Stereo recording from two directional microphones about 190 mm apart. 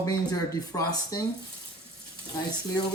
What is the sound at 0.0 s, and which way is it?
Speech, 20° left (ahead or behind).